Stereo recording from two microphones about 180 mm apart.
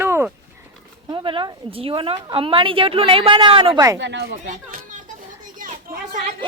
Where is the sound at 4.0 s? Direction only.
75° right (ahead or behind).